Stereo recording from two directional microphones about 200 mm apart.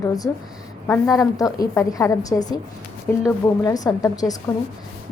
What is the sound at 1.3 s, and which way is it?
A woman's voice, 15° left (ahead or behind).